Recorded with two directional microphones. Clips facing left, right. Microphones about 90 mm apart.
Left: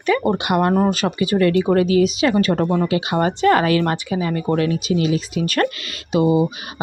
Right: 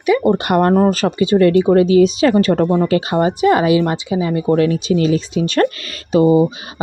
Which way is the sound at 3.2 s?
20° right (ahead or behind).